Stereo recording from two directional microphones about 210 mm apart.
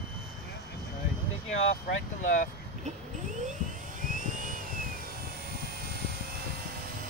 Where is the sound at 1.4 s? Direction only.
35° left (ahead or behind).